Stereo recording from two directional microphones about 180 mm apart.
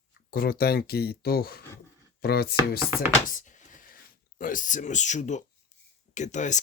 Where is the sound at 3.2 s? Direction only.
45° left (ahead or behind).